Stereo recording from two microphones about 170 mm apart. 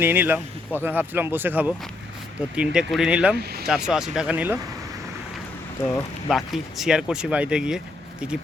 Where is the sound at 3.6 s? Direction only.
5° right (ahead or behind).